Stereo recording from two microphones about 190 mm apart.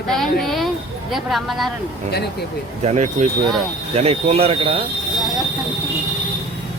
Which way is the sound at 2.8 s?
35° right (ahead or behind).